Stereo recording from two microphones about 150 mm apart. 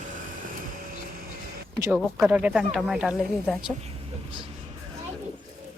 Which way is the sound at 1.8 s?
20° right (ahead or behind).